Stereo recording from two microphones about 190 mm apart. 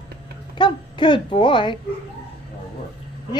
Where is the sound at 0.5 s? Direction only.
25° left (ahead or behind).